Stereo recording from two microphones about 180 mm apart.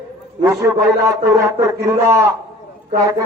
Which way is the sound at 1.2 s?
15° right (ahead or behind).